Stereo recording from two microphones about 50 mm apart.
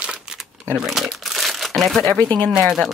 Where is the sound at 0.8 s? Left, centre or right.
Centre.